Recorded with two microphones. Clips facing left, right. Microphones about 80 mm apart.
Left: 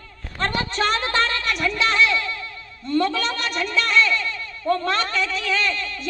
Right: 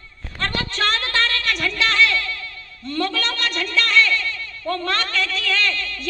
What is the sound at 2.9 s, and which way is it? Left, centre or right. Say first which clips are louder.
A man's voice: left 3 dB; centre.